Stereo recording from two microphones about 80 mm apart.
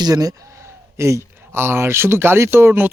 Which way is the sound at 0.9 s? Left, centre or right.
Right.